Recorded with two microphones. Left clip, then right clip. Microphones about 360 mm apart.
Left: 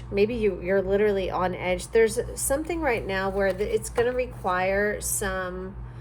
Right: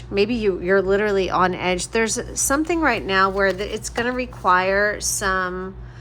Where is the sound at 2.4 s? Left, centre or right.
Right.